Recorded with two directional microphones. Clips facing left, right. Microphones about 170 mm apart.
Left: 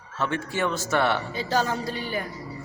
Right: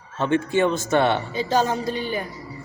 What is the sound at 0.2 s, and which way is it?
Speech, 20° right (ahead or behind).